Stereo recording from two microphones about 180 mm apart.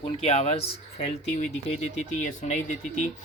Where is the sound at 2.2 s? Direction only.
45° left (ahead or behind).